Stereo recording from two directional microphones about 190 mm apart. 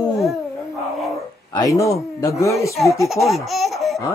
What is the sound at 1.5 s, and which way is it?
Speech, 15° left (ahead or behind).